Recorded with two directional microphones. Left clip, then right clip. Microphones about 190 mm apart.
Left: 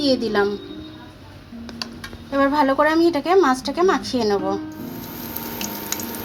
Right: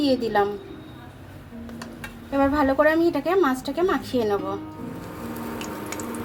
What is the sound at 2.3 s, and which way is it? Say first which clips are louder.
A woman's voice: left 3 dB; 40° left (ahead or behind).